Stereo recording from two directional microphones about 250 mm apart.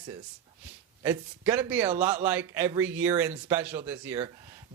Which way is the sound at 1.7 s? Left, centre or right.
Centre.